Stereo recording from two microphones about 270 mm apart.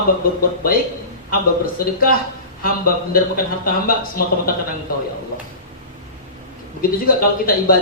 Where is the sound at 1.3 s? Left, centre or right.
Left.